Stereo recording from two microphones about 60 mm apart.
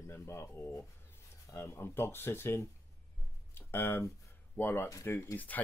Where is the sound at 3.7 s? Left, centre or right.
Left.